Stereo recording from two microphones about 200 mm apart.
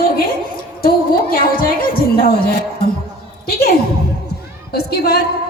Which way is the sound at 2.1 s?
50° left (ahead or behind).